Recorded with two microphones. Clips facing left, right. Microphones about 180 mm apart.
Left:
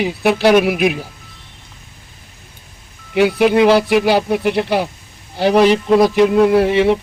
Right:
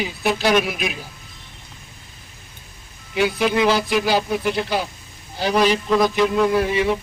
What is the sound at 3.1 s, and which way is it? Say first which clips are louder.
Speech: left 7 dB; 60° left (ahead or behind).